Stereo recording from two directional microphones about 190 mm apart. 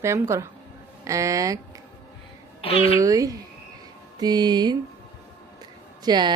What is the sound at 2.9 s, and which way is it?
A woman's voice, 15° right (ahead or behind).